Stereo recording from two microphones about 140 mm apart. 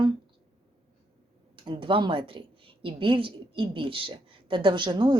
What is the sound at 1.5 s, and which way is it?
A woman's voice, 35° right (ahead or behind).